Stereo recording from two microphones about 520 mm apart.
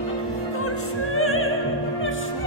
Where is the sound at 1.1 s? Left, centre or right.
Left.